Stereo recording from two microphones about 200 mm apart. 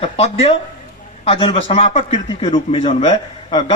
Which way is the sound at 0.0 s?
30° left (ahead or behind).